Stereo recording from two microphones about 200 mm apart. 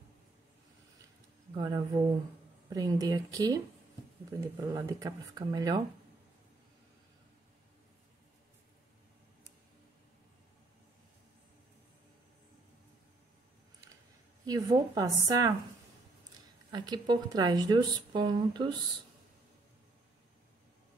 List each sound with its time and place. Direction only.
1.5 s speech: 20° right (ahead or behind)
14.4 s speech: 20° right (ahead or behind)
16.7 s speech: 20° right (ahead or behind)